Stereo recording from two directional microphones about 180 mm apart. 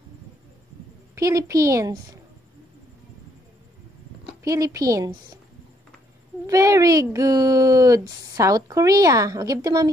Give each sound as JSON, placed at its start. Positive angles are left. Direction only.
{"t": 1.1, "sound": "a woman's voice", "side_deg": -20}
{"t": 4.5, "sound": "speech", "side_deg": -20}
{"t": 6.4, "sound": "speech", "side_deg": -20}